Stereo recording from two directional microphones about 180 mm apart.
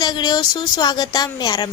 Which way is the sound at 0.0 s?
25° left (ahead or behind).